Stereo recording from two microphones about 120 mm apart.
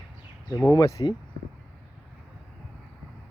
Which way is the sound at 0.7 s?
30° left (ahead or behind).